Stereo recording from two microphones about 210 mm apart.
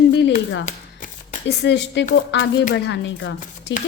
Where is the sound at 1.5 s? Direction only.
55° left (ahead or behind).